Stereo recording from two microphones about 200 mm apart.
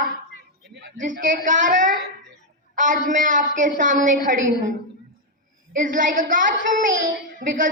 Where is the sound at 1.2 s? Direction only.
40° right (ahead or behind).